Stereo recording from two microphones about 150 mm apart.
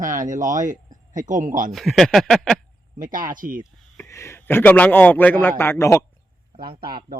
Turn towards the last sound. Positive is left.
turn(degrees=-85)